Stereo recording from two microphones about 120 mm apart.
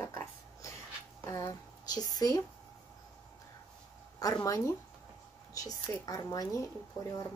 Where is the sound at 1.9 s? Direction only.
35° left (ahead or behind).